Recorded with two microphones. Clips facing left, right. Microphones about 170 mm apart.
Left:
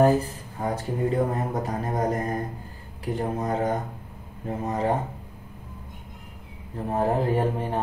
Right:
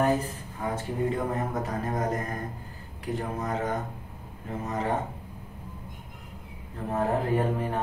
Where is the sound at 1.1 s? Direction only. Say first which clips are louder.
Left 4 dB; 35° left (ahead or behind).